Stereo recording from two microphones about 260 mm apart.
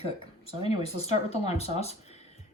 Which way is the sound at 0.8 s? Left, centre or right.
Left.